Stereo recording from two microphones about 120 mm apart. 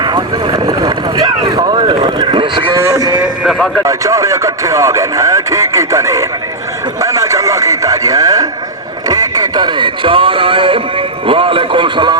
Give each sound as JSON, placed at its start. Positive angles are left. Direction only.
{"t": 0.0, "sound": "boat", "side_deg": -40}
{"t": 2.7, "sound": "a sound", "side_deg": -25}
{"t": 3.2, "sound": "music", "side_deg": -5}
{"t": 3.8, "sound": "speech", "side_deg": -30}
{"t": 7.0, "sound": "radio", "side_deg": -25}
{"t": 9.0, "sound": "speech", "side_deg": -30}